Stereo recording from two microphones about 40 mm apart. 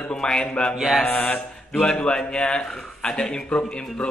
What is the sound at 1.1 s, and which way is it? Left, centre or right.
Speech, left.